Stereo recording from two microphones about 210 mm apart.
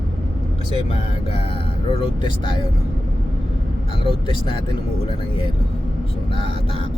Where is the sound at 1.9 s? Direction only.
25° left (ahead or behind).